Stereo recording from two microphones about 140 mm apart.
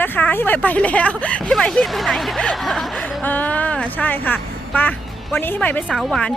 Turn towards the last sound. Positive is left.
turn(degrees=5)  # may be behind; listen again after turning